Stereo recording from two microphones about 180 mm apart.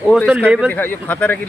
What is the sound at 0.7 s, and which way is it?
Speech, 10° left (ahead or behind).